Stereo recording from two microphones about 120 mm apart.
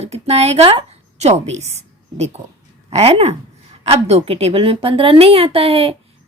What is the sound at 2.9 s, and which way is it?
A woman's voice, 60° right (ahead or behind).